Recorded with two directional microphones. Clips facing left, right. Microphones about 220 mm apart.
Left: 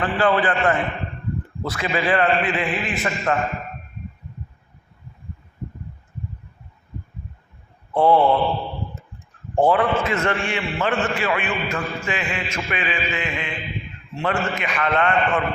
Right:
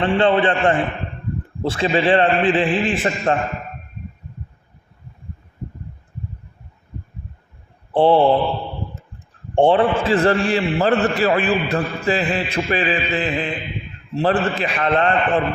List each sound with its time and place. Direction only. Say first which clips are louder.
0.0 s a man's voice: right 4 dB; 25° right (ahead or behind)
7.9 s a man's voice: right 3 dB; 30° right (ahead or behind)
9.6 s a man's voice: right 3 dB; 30° right (ahead or behind)